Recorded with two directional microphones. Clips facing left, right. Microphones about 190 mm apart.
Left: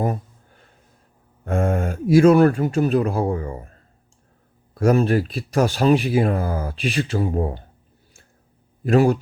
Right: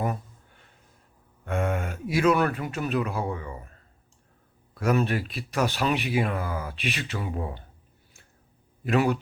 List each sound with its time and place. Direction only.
1.5 s speech: 35° left (ahead or behind)
8.8 s speech: 40° left (ahead or behind)